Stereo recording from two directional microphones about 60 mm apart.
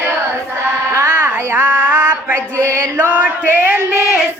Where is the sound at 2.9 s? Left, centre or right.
Right.